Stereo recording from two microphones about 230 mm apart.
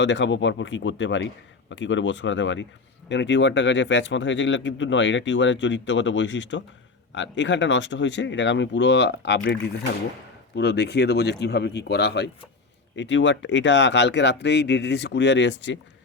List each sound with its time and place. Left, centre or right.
0.0 s speech: left